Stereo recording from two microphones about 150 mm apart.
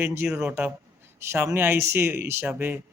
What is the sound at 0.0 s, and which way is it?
A man's voice, 15° right (ahead or behind).